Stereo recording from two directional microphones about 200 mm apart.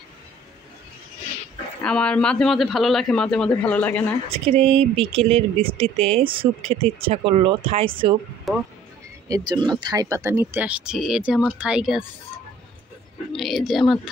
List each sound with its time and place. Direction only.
1.8 s a man's voice: 5° left (ahead or behind)
4.3 s speech: 30° right (ahead or behind)
8.5 s a man's voice: centre (ahead or behind)
9.5 s speech: 20° right (ahead or behind); by 12.0 s 5° right (ahead or behind)
13.4 s a man's voice: centre (ahead or behind)